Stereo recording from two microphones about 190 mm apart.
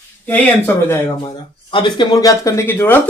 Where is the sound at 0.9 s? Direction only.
20° left (ahead or behind).